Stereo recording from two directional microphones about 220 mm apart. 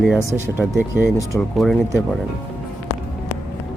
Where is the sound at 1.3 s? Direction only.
5° left (ahead or behind).